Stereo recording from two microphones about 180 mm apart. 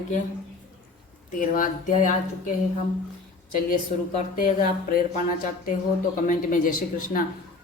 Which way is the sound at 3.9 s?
40° left (ahead or behind).